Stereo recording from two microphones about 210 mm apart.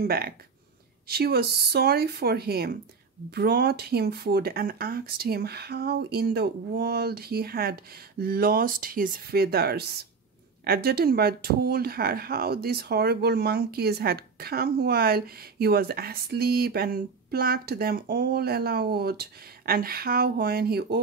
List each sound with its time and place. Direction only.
0.0 s speech: 45° right (ahead or behind)